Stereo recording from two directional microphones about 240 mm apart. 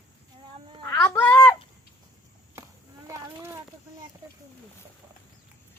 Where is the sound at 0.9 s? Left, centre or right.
Centre.